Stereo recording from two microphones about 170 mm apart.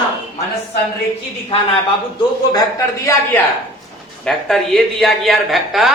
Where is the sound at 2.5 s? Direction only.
20° left (ahead or behind).